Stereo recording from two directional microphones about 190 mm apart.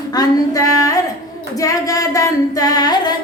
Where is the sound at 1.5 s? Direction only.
20° left (ahead or behind).